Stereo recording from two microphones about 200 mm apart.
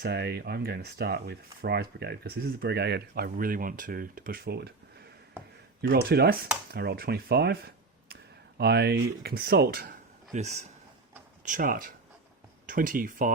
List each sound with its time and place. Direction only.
0.0 s speech: 55° right (ahead or behind)
5.8 s speech: 50° right (ahead or behind)
10.3 s speech: 35° right (ahead or behind)